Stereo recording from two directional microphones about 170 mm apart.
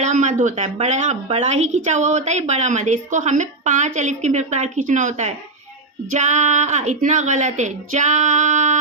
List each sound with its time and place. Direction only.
0.0 s a woman's voice: 45° right (ahead or behind)